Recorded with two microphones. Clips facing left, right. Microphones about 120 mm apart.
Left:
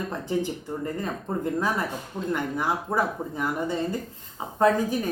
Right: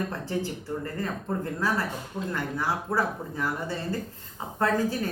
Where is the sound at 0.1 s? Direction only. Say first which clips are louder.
Left 3 dB; 15° left (ahead or behind).